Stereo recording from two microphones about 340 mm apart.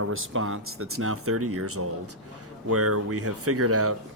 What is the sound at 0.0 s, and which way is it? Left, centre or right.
Speech, right.